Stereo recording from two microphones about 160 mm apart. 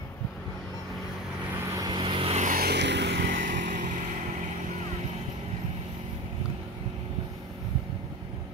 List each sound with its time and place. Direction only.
1.7 s vehicle: 25° right (ahead or behind)
2.4 s vehicle: 70° right (ahead or behind); by 3.8 s 90° right